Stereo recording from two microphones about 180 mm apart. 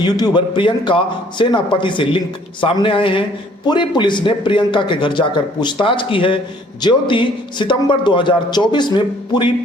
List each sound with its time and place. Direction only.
0.0 s a man's voice: 25° left (ahead or behind)